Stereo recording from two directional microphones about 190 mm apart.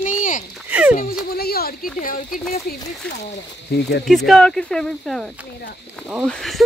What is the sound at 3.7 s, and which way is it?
Speech, 55° left (ahead or behind).